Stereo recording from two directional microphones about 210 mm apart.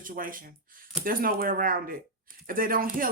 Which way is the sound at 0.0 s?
40° right (ahead or behind).